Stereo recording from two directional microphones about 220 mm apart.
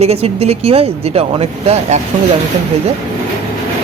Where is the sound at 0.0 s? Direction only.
30° right (ahead or behind).